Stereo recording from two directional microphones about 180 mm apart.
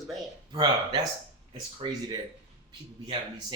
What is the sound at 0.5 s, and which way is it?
Speech, 30° right (ahead or behind).